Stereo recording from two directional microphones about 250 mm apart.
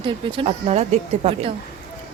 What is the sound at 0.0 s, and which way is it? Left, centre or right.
A woman's voice, right.